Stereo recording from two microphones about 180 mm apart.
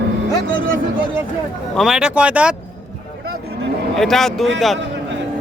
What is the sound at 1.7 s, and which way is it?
Speech, centre (ahead or behind).